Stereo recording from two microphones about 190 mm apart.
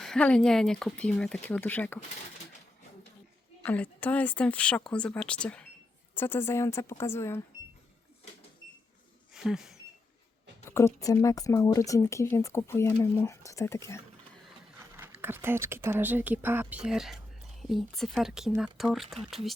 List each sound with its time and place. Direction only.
0.0 s speech: 5° left (ahead or behind)
3.6 s speech: 10° left (ahead or behind)
9.3 s a sound: 5° right (ahead or behind)
10.7 s speech: 15° left (ahead or behind)
14.8 s speech: 10° right (ahead or behind)